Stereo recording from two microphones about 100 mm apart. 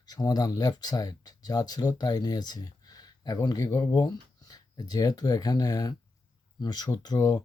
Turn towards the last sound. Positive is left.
turn(degrees=40)  # may be behind; listen again after turning